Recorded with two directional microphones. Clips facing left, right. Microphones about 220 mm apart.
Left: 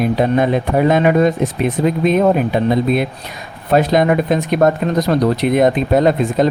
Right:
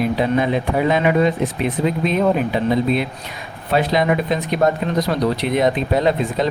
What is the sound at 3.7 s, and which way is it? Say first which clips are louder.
Speech: left 4 dB; 45° left (ahead or behind).